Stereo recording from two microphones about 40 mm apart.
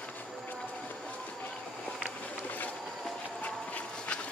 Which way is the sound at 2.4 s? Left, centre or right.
Left.